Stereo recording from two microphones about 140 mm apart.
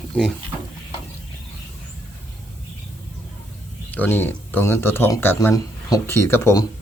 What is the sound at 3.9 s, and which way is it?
Speech, 15° left (ahead or behind).